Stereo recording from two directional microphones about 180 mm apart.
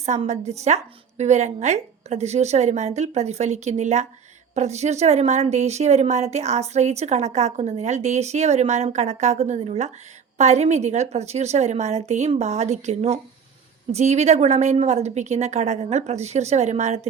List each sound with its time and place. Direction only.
0.0 s a woman's voice: 40° right (ahead or behind)